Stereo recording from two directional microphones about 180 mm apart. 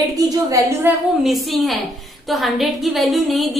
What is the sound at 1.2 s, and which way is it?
A woman's voice, centre (ahead or behind).